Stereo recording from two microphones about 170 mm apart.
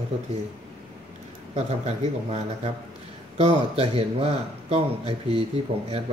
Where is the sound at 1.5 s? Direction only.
35° right (ahead or behind).